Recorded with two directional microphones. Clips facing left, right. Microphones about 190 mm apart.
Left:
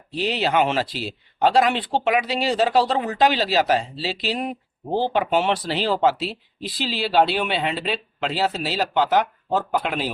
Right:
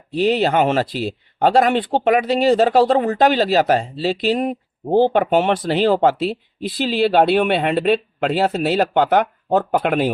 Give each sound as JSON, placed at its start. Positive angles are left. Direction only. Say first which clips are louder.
{"t": 0.1, "sound": "speech", "louder": "right 6 dB", "side_deg": -45}